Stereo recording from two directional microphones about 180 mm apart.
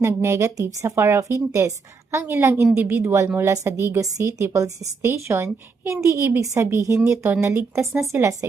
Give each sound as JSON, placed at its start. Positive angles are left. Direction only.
{"t": 0.0, "sound": "a woman's voice", "side_deg": -15}